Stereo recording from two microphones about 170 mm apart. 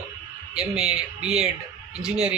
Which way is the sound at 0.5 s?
5° right (ahead or behind).